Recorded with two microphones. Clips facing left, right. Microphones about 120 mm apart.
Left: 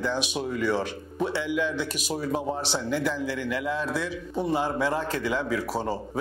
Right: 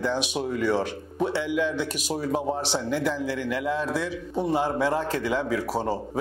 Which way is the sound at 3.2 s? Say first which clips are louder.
Right 1 dB; 50° right (ahead or behind).